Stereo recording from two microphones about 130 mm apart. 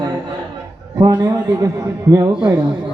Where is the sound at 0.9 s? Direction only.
20° right (ahead or behind).